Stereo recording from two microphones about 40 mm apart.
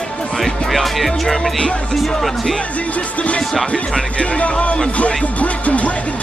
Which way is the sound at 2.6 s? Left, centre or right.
Left.